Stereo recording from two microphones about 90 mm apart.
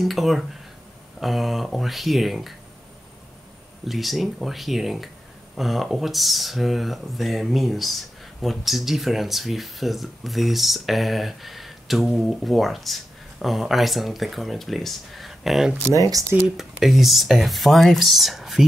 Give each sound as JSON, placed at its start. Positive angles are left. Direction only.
{"t": 0.0, "sound": "speech", "side_deg": 0}
{"t": 3.8, "sound": "speech", "side_deg": 0}
{"t": 15.9, "sound": "speech", "side_deg": -40}
{"t": 16.5, "sound": "speech", "side_deg": 0}